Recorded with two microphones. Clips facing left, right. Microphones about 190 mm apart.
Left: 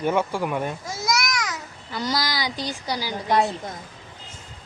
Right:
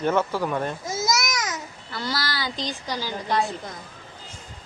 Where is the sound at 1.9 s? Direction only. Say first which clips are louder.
Left 3 dB; 15° left (ahead or behind).